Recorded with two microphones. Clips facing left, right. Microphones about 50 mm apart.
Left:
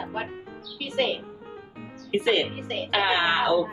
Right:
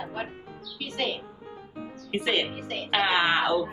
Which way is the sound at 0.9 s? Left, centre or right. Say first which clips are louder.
Left 5 dB; centre.